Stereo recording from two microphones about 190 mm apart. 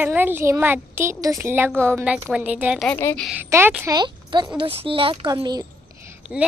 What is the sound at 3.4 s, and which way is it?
A woman's voice, 10° right (ahead or behind).